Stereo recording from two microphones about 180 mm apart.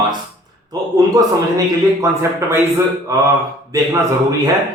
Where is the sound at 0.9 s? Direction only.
20° right (ahead or behind).